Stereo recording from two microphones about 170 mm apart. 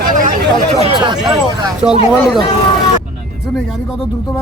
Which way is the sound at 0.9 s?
25° right (ahead or behind).